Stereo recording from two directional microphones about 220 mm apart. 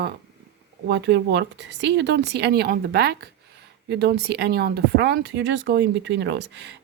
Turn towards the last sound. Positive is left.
turn(degrees=-50)  # may be behind; listen again after turning